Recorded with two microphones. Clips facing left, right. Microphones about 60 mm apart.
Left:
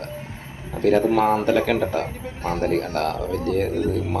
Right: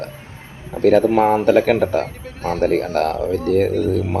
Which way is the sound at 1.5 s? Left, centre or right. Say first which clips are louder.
Right 6 dB; right.